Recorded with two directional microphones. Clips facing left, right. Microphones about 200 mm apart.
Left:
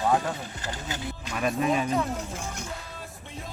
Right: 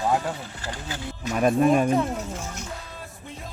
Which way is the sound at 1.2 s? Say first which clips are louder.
Right 7 dB; 45° right (ahead or behind).